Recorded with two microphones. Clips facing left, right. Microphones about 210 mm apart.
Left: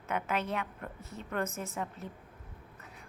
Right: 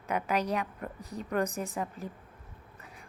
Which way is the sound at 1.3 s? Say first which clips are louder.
Right 4 dB; 15° right (ahead or behind).